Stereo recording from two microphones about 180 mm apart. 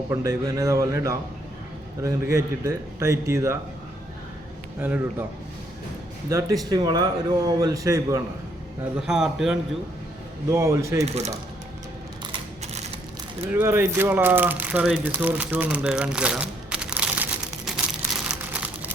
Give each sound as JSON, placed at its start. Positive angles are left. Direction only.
{"t": 0.1, "sound": "speech", "side_deg": -15}
{"t": 4.8, "sound": "speech", "side_deg": -10}
{"t": 6.2, "sound": "a man's voice", "side_deg": -20}
{"t": 9.0, "sound": "speech", "side_deg": -5}
{"t": 10.5, "sound": "speech", "side_deg": -15}
{"t": 11.1, "sound": "speech", "side_deg": -35}
{"t": 13.4, "sound": "speech", "side_deg": -10}
{"t": 17.7, "sound": "a sound", "side_deg": -5}
{"t": 18.3, "sound": "crumpling", "side_deg": -5}